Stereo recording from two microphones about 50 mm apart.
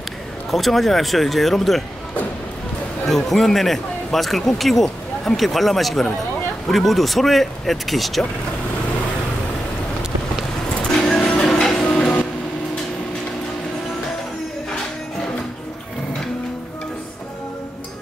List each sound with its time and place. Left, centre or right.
0.5 s speech: centre
3.1 s speech: centre
10.8 s music: centre
11.4 s tick-tock: centre
12.0 s printer: centre